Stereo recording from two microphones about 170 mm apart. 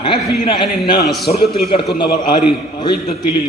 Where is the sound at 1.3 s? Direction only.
40° left (ahead or behind).